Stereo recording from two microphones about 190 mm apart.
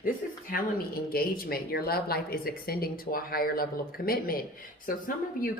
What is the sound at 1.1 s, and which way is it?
Speech, 50° left (ahead or behind).